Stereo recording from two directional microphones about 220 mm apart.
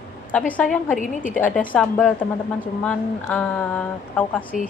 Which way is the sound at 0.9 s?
35° left (ahead or behind).